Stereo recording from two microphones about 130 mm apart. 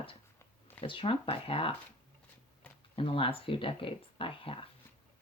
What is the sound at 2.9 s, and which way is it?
Speech, 45° left (ahead or behind).